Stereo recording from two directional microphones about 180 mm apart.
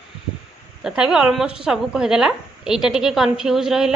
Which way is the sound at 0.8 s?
5° right (ahead or behind).